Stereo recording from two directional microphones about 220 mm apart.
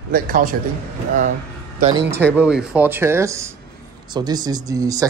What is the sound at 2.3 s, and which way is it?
Speech, 5° right (ahead or behind).